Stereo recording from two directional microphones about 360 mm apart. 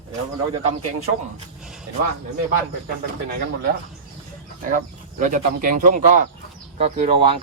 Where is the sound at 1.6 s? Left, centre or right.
Centre.